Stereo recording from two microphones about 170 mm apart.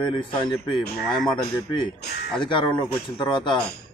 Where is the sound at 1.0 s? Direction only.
Centre (ahead or behind).